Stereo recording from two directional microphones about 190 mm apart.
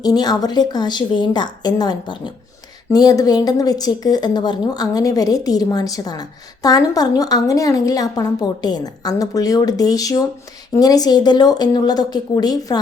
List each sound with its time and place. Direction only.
0.0 s a woman's voice: 20° left (ahead or behind)